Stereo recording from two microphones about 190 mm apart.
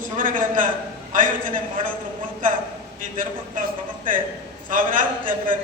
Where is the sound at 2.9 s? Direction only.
45° right (ahead or behind).